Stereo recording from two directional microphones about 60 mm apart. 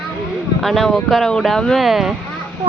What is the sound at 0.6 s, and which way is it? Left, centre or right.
Speech, centre.